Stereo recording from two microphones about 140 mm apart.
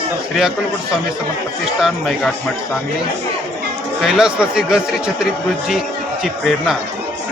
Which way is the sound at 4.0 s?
5° right (ahead or behind).